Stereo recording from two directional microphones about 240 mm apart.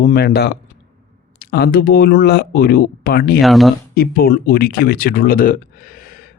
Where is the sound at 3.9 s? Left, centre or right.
Left.